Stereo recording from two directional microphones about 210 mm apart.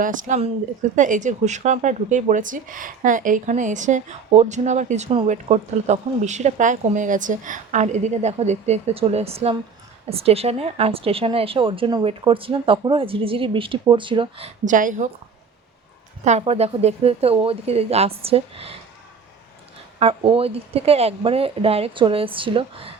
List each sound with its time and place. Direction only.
0.0 s a woman's voice: 40° right (ahead or behind)
16.2 s a woman's voice: 30° right (ahead or behind)
20.0 s a woman's voice: 25° right (ahead or behind)